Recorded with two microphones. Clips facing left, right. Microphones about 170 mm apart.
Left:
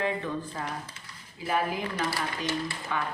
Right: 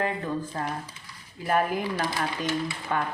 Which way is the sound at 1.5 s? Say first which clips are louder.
Right 4 dB; 50° right (ahead or behind).